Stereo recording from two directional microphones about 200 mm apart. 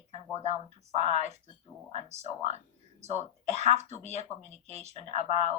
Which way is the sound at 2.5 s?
35° right (ahead or behind).